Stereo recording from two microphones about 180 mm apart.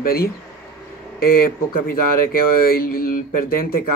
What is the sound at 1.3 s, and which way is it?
Speech, 55° left (ahead or behind).